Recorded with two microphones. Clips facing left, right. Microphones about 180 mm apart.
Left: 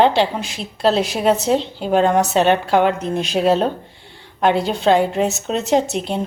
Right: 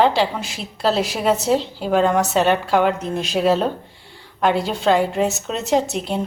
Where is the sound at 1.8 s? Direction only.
30° left (ahead or behind).